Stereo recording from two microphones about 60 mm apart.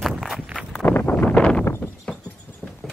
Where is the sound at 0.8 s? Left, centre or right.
Left; by 1.6 s centre.